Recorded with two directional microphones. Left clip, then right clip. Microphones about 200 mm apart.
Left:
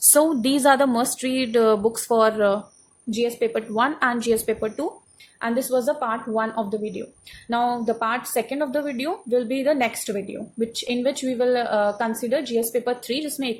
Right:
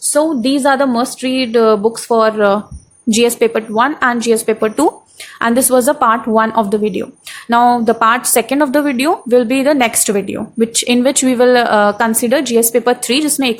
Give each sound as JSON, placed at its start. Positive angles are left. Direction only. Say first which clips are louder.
{"t": 0.1, "sound": "a woman's voice", "louder": "right 6 dB", "side_deg": 0}
{"t": 3.1, "sound": "a woman's voice", "louder": "right 11 dB", "side_deg": -40}
{"t": 3.4, "sound": "a woman's voice", "louder": "right 9 dB", "side_deg": -15}
{"t": 5.4, "sound": "a woman's voice", "louder": "right 11 dB", "side_deg": -30}